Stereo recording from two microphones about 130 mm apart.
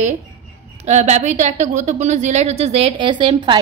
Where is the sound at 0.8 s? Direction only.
60° right (ahead or behind); by 3.6 s 40° right (ahead or behind).